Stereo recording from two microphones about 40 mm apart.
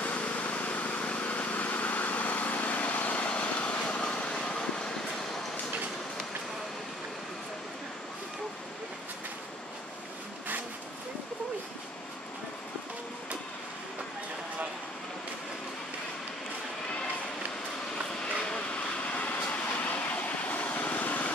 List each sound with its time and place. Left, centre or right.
0.0 s vehicle: left
19.0 s vehicle: left